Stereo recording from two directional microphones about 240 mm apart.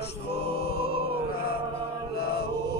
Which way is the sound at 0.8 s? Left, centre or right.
Left.